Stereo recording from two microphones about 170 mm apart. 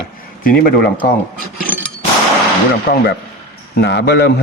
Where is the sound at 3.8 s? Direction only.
75° left (ahead or behind).